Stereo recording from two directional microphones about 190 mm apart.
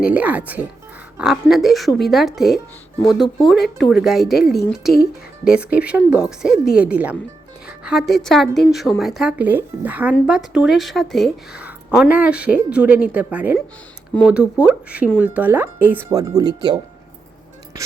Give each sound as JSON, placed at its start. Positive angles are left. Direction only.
{"t": 0.0, "sound": "speech", "side_deg": -5}